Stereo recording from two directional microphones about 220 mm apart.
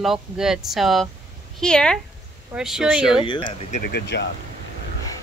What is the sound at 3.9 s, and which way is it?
Speech, 50° left (ahead or behind).